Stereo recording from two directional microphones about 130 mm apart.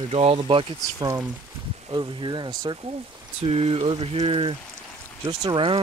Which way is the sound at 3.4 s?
50° right (ahead or behind).